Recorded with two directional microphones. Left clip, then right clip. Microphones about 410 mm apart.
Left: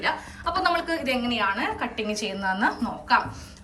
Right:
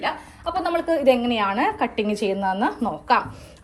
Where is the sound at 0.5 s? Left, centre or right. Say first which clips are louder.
Right 2 dB; centre.